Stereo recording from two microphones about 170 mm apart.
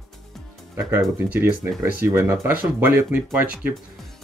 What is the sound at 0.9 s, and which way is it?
Speech, 15° right (ahead or behind).